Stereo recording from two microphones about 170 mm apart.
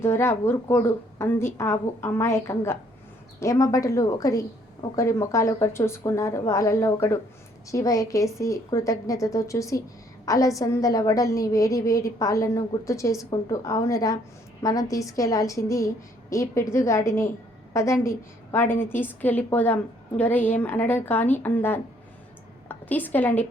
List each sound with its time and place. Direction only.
0.0 s a woman's voice: 15° left (ahead or behind)